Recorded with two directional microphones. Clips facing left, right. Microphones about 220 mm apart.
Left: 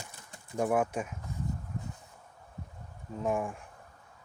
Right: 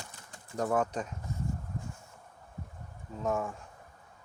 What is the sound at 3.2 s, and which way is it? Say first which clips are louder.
Speech: left 1 dB; 15° left (ahead or behind).